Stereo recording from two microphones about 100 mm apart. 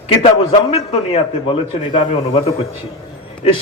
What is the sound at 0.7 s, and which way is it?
A man's voice, 85° left.